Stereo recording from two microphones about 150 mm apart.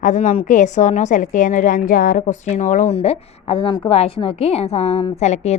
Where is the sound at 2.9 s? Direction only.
45° left (ahead or behind).